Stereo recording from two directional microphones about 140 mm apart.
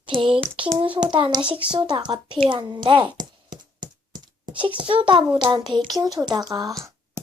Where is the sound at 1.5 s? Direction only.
35° right (ahead or behind).